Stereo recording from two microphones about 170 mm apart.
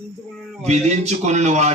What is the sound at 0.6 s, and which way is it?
Speech, 40° right (ahead or behind).